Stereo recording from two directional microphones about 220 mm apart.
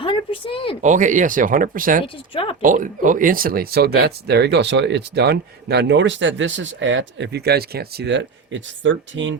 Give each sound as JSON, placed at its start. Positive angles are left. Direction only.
{"t": 0.0, "sound": "a sound", "side_deg": 25}
{"t": 0.8, "sound": "speech", "side_deg": -35}
{"t": 2.3, "sound": "speech", "side_deg": 25}
{"t": 2.6, "sound": "speech", "side_deg": -35}